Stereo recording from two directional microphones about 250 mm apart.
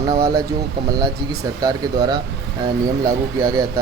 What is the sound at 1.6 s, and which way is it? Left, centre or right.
Speech, centre.